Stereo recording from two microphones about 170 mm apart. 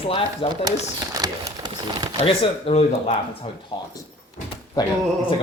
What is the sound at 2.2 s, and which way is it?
Speech, 35° left (ahead or behind).